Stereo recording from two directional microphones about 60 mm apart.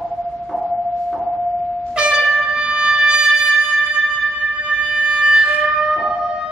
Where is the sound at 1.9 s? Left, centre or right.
Centre.